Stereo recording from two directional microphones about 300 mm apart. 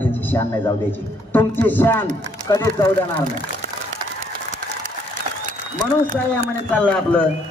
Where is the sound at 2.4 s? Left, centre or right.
Centre.